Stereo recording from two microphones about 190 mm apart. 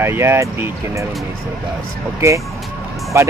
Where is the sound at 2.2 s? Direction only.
15° right (ahead or behind).